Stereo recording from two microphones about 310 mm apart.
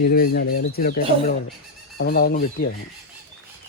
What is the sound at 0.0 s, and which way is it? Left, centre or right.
Speech, left.